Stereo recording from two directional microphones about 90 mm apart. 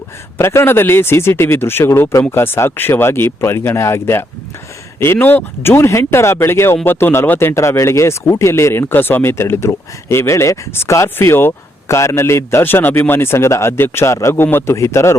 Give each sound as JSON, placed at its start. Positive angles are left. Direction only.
{"t": 0.3, "sound": "a man's voice", "side_deg": 30}